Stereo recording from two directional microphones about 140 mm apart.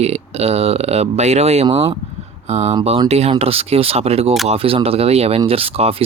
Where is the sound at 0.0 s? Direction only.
50° right (ahead or behind).